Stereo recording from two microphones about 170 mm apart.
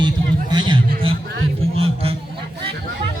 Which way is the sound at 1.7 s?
35° right (ahead or behind).